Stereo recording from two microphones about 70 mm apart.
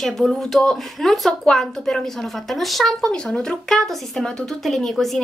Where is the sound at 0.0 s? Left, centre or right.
Centre.